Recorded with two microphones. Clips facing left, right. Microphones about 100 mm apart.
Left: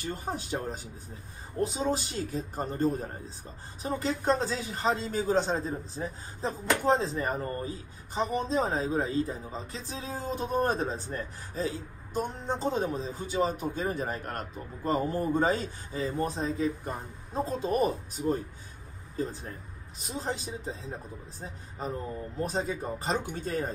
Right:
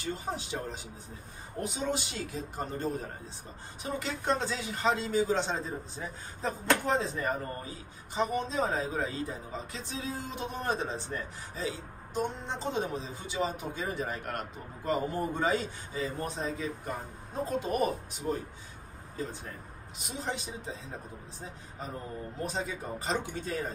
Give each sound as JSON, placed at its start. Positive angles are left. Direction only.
{"t": 0.0, "sound": "speech", "side_deg": 50}
{"t": 1.6, "sound": "speech", "side_deg": 35}